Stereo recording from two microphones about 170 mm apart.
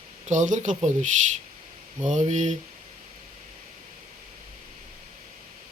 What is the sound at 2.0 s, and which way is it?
Speech, 45° right (ahead or behind).